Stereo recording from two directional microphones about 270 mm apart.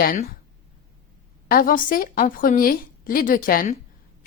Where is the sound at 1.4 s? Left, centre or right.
Left.